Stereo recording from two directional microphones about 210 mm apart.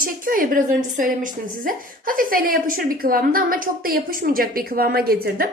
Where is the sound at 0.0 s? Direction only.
40° right (ahead or behind).